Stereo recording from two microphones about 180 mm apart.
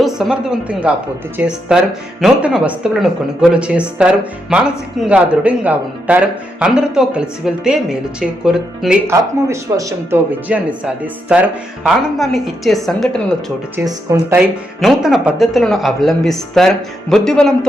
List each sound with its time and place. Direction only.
0.0 s a sound: centre (ahead or behind)
1.4 s speech: 5° right (ahead or behind)
9.0 s speech: 15° right (ahead or behind); by 13.2 s centre (ahead or behind)
13.7 s speech: 15° right (ahead or behind)
14.8 s speech: centre (ahead or behind)